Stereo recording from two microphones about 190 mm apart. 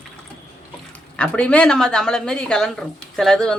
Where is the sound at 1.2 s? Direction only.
5° left (ahead or behind).